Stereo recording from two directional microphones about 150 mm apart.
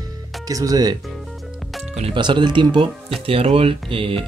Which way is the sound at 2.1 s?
30° right (ahead or behind).